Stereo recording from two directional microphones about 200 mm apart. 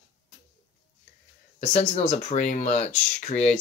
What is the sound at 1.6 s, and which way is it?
Speech, 30° left (ahead or behind).